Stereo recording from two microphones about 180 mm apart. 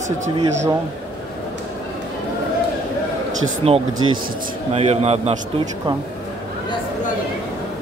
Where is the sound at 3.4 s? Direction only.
35° right (ahead or behind).